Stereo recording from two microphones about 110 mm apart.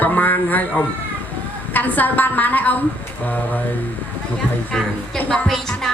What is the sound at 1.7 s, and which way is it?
A woman's voice, 15° left (ahead or behind).